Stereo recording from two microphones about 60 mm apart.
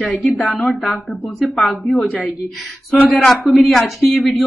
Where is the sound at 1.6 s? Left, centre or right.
Centre.